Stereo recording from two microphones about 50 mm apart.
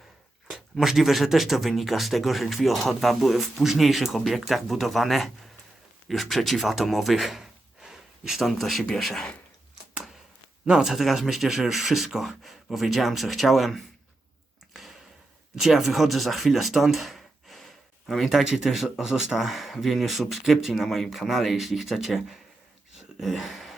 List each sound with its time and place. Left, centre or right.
0.4 s speech: centre
10.7 s speech: centre
10.9 s speech: centre
14.7 s a sound: centre
15.5 s speech: centre
23.0 s a sound: centre